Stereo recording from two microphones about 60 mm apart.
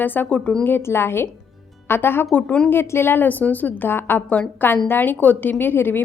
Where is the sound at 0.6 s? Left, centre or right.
Left.